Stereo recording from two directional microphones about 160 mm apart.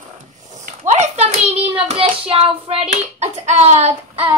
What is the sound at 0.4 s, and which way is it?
Hands, 50° right (ahead or behind).